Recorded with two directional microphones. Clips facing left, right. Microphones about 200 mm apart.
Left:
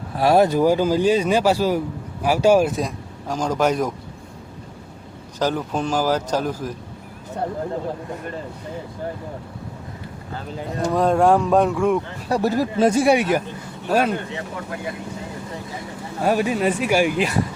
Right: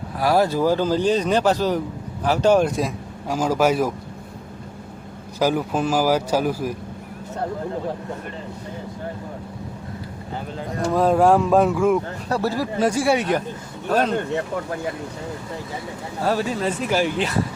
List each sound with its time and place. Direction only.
0.2 s speech: 25° left (ahead or behind); by 3.9 s 5° right (ahead or behind)
5.4 s speech: 10° right (ahead or behind)
10.9 s speech: centre (ahead or behind)
12.3 s speech: 15° left (ahead or behind)
13.1 s speech: 10° left (ahead or behind)
16.2 s speech: 15° left (ahead or behind)